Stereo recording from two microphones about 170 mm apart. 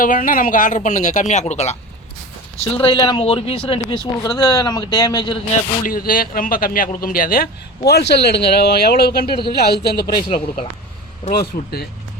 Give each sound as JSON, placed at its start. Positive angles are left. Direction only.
{"t": 0.0, "sound": "speech", "side_deg": 55}
{"t": 2.8, "sound": "speech", "side_deg": 30}
{"t": 5.8, "sound": "a man's voice", "side_deg": 55}
{"t": 7.9, "sound": "a man's voice", "side_deg": 75}
{"t": 10.2, "sound": "speech", "side_deg": 30}
{"t": 11.3, "sound": "a man's voice", "side_deg": 65}